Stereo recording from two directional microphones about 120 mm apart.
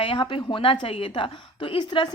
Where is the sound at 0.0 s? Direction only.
45° left (ahead or behind).